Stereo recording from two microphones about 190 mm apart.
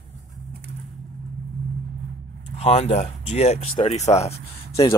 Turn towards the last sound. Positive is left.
turn(degrees=30)  # may be behind; listen again after turning